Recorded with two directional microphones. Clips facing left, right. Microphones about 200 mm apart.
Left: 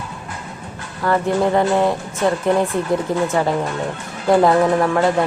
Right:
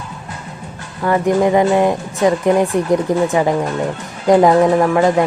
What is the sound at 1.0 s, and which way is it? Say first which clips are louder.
Speech: right 3 dB; 10° right (ahead or behind).